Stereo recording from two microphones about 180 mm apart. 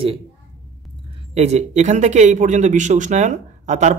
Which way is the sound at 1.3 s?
40° right (ahead or behind).